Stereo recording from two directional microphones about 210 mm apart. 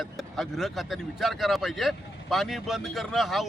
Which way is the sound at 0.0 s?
Centre (ahead or behind).